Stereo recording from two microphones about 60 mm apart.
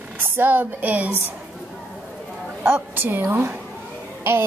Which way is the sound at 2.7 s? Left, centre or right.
Right.